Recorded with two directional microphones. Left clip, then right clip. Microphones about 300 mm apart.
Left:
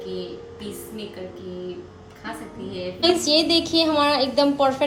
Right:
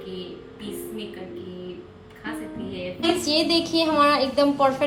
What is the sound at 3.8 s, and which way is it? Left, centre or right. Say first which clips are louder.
Speech: right 2 dB; centre.